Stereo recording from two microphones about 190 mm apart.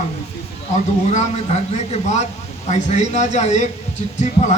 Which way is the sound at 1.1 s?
35° left (ahead or behind).